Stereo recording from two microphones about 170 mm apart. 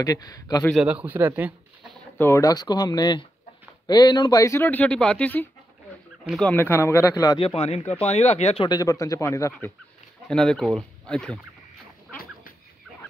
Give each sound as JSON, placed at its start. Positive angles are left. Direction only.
{"t": 0.0, "sound": "speech", "side_deg": 20}
{"t": 0.7, "sound": "a man's voice", "side_deg": -5}
{"t": 2.1, "sound": "speech", "side_deg": 15}
{"t": 6.2, "sound": "speech", "side_deg": 0}
{"t": 6.5, "sound": "speech", "side_deg": 10}
{"t": 7.3, "sound": "speech", "side_deg": 35}
{"t": 8.6, "sound": "speech", "side_deg": 20}
{"t": 10.2, "sound": "speech", "side_deg": 5}